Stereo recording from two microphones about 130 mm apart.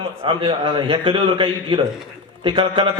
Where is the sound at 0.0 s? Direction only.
45° right (ahead or behind).